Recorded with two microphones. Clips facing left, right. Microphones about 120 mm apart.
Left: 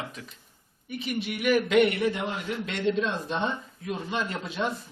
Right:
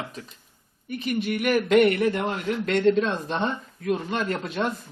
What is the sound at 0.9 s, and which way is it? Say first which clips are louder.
Speech: right 5 dB; 45° right (ahead or behind).